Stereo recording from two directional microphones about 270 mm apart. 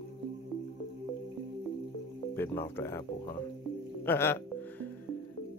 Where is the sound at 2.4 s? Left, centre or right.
Centre.